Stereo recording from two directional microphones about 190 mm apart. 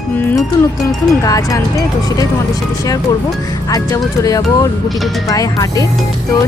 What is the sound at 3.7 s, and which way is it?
Speech, 20° left (ahead or behind).